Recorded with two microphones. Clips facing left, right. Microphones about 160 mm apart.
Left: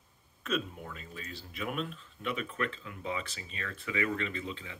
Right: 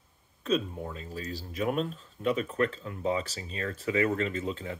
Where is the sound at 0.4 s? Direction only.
30° right (ahead or behind).